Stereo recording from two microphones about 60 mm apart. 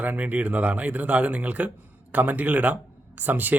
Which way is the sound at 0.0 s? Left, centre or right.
Right.